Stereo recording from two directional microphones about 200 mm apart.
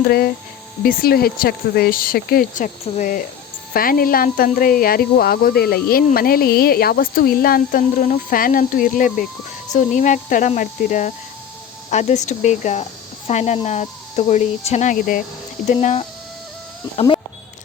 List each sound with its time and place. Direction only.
0.0 s speech: 50° left (ahead or behind); by 16.0 s 35° left (ahead or behind)